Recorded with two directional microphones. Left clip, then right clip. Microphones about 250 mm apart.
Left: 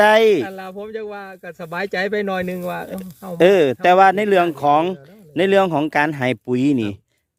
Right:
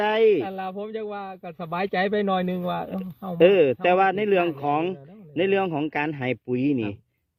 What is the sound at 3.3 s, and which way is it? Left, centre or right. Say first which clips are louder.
A man's voice: left 4 dB; left.